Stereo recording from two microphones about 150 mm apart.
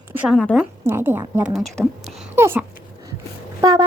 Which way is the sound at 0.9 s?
15° right (ahead or behind).